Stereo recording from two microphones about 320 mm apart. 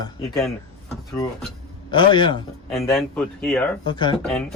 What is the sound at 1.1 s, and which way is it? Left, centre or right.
Speech, centre.